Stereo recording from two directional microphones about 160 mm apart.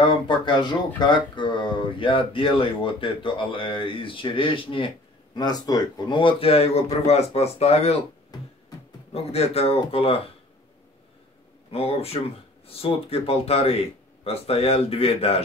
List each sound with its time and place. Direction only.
0.0 s speech: 30° left (ahead or behind)
9.1 s speech: 40° left (ahead or behind)
11.7 s speech: 40° left (ahead or behind)